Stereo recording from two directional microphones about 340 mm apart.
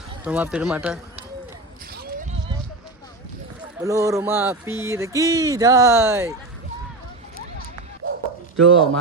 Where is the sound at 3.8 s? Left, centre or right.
Centre.